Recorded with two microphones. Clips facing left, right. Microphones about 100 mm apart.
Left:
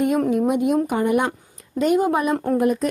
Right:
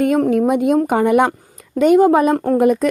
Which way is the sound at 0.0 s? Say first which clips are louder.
Right 4 dB; 55° right (ahead or behind).